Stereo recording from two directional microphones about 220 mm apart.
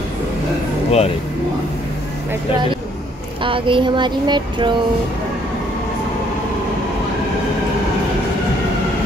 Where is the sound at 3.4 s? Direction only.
25° right (ahead or behind).